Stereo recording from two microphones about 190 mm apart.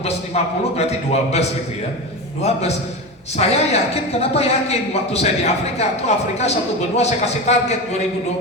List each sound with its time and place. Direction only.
0.0 s a man's voice: 35° left (ahead or behind)